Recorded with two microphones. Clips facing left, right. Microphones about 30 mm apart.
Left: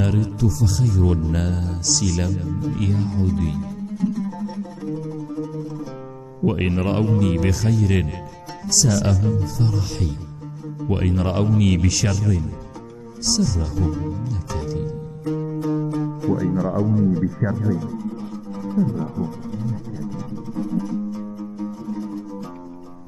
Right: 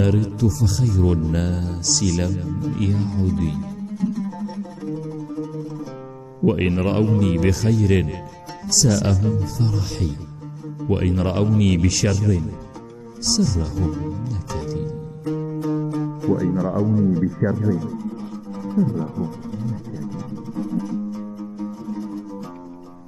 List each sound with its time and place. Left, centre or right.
0.0 s speech: centre
18.5 s music: centre